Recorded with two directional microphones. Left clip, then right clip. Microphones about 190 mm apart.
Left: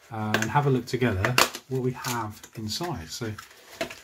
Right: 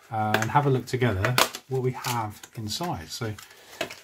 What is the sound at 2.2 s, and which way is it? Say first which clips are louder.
Speech: right 1 dB; 30° right (ahead or behind).